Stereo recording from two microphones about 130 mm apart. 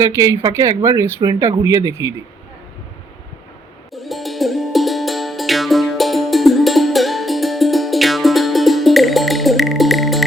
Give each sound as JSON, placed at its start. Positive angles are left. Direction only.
{"t": 0.0, "sound": "speech", "side_deg": -25}
{"t": 3.9, "sound": "music", "side_deg": 0}